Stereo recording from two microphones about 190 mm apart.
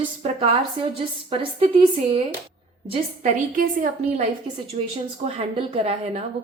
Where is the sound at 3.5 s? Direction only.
45° right (ahead or behind).